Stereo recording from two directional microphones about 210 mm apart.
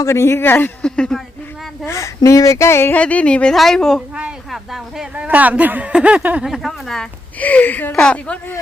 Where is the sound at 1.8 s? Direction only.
15° left (ahead or behind).